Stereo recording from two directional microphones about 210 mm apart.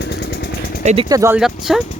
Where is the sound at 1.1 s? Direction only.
15° right (ahead or behind).